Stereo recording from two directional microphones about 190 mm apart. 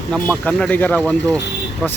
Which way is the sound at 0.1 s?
5° left (ahead or behind).